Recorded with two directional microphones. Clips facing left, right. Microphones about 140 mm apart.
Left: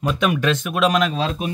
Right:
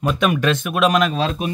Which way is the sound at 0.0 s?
50° right (ahead or behind).